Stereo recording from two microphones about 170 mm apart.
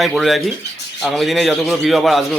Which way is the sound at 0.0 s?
Centre (ahead or behind).